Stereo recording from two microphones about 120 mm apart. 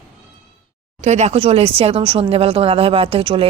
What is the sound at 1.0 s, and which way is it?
Speech, 70° right (ahead or behind).